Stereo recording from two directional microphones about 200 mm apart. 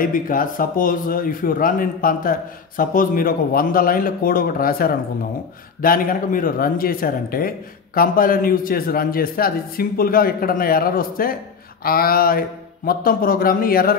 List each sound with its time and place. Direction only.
0.0 s speech: 45° left (ahead or behind)